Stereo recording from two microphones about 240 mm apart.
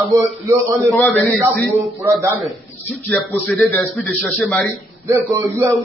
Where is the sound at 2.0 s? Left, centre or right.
Centre.